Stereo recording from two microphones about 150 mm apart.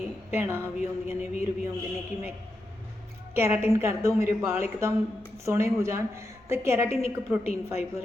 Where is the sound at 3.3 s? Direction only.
15° right (ahead or behind).